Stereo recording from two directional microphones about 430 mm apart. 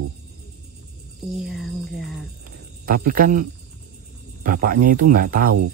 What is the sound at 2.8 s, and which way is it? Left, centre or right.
Speech, centre.